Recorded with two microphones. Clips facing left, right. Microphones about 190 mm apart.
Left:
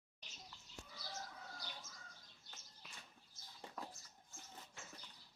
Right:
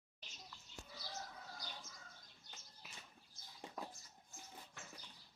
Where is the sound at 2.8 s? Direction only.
5° right (ahead or behind).